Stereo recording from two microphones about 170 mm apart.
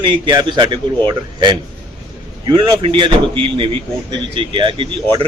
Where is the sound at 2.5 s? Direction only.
30° right (ahead or behind).